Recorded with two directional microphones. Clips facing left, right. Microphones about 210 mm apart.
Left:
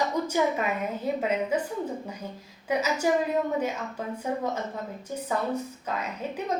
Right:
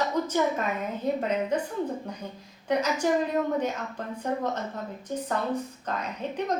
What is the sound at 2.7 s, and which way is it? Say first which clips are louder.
A woman's voice: even; 5° left (ahead or behind).